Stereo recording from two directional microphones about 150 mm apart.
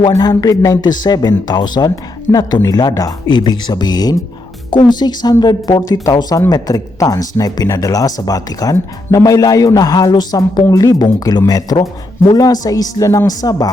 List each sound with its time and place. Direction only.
0.1 s speech: 25° left (ahead or behind)